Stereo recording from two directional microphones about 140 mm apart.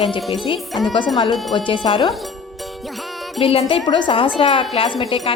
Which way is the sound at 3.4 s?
45° left (ahead or behind).